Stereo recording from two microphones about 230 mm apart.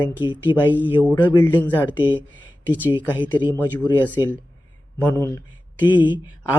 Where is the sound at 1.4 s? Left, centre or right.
Centre.